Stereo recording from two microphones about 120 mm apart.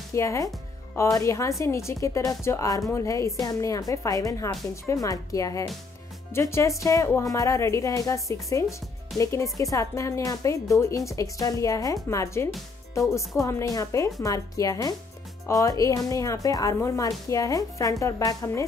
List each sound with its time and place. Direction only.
0.1 s speech: 25° left (ahead or behind)